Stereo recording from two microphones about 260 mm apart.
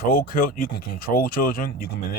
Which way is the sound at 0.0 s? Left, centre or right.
Left.